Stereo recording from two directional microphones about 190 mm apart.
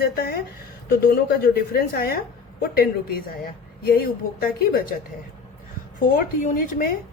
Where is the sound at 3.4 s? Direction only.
50° left (ahead or behind).